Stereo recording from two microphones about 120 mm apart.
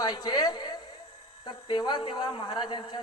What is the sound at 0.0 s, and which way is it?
A woman's voice, 35° left (ahead or behind).